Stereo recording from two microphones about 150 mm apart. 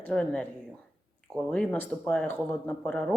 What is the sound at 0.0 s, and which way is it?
Speech, 5° left (ahead or behind).